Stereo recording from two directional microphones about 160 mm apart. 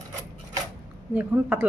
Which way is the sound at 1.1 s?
10° right (ahead or behind).